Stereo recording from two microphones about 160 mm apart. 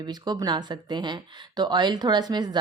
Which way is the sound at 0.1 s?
25° right (ahead or behind).